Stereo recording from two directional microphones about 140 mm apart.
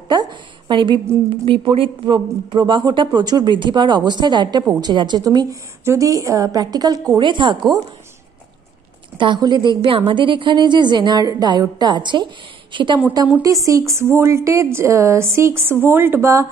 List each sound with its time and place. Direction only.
0.1 s speech: 30° right (ahead or behind)
9.2 s speech: 35° right (ahead or behind)
13.3 s a woman's voice: 25° right (ahead or behind)